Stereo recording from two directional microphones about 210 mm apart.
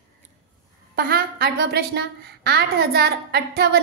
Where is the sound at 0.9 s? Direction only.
45° right (ahead or behind).